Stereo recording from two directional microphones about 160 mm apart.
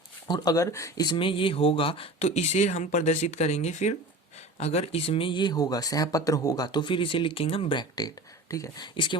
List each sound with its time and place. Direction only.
0.3 s speech: 25° left (ahead or behind)